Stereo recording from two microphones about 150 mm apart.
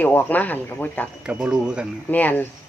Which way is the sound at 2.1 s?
10° left (ahead or behind).